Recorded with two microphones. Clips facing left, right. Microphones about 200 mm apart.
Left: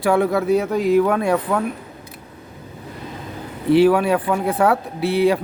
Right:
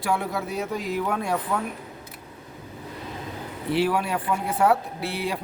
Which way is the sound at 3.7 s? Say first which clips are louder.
Left 10 dB; 65° left (ahead or behind).